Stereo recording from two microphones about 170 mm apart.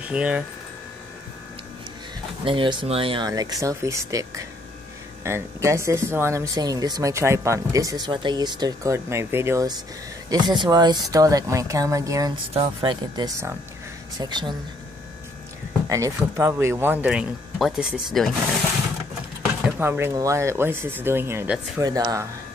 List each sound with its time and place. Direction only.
0.0 s speech: 5° right (ahead or behind)
2.4 s speech: 30° right (ahead or behind)
3.3 s speech: 20° right (ahead or behind)
15.9 s speech: 20° right (ahead or behind); by 18.3 s centre (ahead or behind)
19.8 s speech: 15° right (ahead or behind)